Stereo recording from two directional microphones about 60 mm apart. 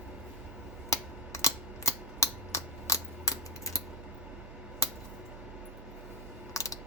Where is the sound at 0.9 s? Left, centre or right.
Left.